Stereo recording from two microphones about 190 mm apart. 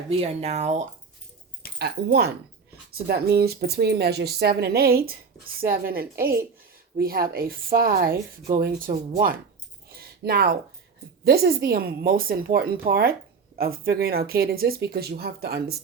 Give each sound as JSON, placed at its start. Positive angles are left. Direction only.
{"t": 0.1, "sound": "speech", "side_deg": -35}
{"t": 1.8, "sound": "speech", "side_deg": -55}
{"t": 9.9, "sound": "a sound", "side_deg": -55}
{"t": 11.3, "sound": "speech", "side_deg": -55}